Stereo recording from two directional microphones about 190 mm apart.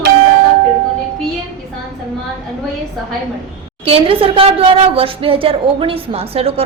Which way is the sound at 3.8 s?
30° right (ahead or behind).